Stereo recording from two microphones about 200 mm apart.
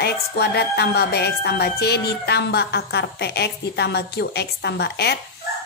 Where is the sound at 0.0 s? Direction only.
55° left (ahead or behind).